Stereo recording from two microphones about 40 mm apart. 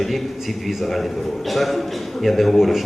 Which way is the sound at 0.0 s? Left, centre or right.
Centre.